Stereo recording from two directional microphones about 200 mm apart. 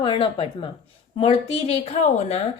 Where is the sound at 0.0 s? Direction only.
25° left (ahead or behind).